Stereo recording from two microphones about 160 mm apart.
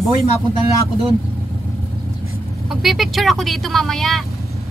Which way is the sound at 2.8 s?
Centre (ahead or behind).